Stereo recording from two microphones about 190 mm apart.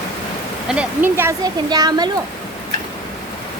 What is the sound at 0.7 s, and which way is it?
Speech, 10° right (ahead or behind).